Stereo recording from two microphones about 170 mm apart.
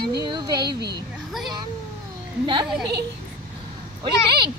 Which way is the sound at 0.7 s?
75° right (ahead or behind).